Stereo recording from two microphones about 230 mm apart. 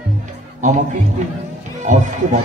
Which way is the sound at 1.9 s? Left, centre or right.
Right.